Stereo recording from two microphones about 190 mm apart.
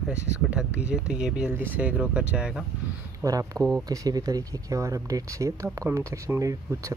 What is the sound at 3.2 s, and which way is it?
Speech, 20° right (ahead or behind).